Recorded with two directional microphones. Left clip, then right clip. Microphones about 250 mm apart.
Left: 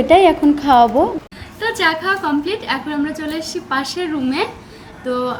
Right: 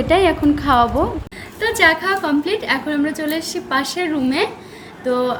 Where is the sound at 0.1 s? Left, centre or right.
Centre.